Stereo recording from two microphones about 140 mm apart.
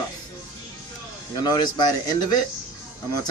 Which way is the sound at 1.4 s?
30° left (ahead or behind).